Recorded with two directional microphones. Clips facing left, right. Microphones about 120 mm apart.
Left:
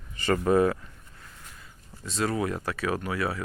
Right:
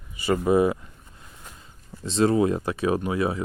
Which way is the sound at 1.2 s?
25° right (ahead or behind).